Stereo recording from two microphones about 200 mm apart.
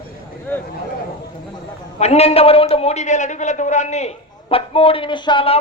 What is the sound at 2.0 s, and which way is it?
A man's voice, 30° left (ahead or behind).